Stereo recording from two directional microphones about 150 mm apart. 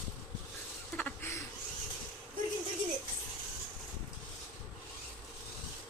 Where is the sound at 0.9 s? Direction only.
15° left (ahead or behind).